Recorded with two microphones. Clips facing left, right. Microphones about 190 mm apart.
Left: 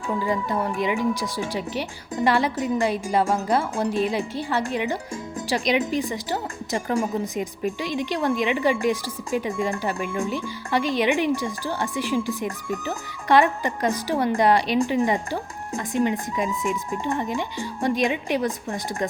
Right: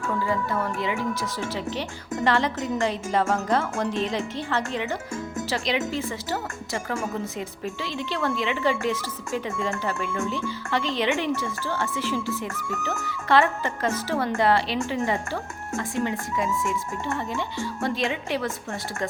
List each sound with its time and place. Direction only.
0.1 s speech: 15° left (ahead or behind)